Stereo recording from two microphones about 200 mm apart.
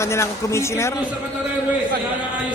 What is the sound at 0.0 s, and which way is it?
Speech, 15° left (ahead or behind).